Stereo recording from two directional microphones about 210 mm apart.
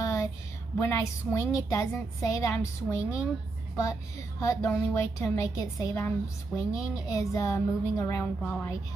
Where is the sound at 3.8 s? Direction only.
15° left (ahead or behind).